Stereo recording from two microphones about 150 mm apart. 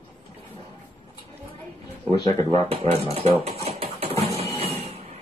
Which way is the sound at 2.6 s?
40° right (ahead or behind).